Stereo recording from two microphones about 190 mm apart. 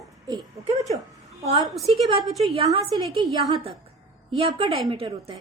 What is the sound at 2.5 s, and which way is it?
A woman's voice, 30° right (ahead or behind).